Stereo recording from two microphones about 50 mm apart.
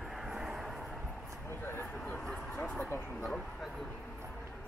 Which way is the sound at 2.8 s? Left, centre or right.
Left.